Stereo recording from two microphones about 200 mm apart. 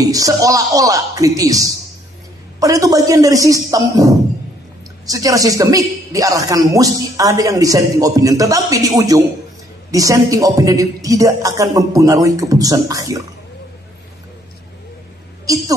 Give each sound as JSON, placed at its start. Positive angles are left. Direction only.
{"t": 0.0, "sound": "a man's voice", "side_deg": -15}
{"t": 15.5, "sound": "a man's voice", "side_deg": -15}